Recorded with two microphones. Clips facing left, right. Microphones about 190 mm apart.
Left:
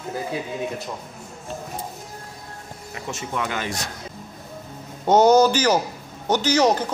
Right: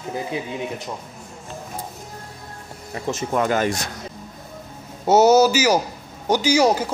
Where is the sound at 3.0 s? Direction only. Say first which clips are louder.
Right 7 dB; 40° right (ahead or behind).